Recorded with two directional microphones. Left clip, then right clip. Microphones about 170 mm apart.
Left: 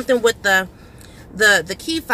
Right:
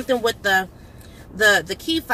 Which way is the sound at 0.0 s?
20° left (ahead or behind).